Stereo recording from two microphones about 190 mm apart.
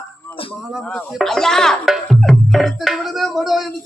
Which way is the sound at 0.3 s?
10° left (ahead or behind).